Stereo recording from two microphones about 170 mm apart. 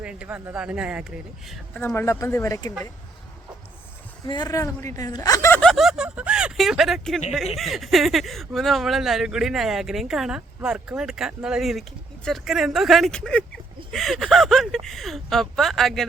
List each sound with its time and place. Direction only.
0.0 s speech: 5° right (ahead or behind)
1.7 s speech: 10° left (ahead or behind)
4.3 s a woman's voice: 25° left (ahead or behind)
5.5 s a sound: centre (ahead or behind)
7.5 s speech: centre (ahead or behind)